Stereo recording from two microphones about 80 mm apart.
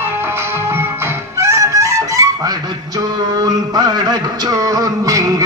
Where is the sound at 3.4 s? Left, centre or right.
Right.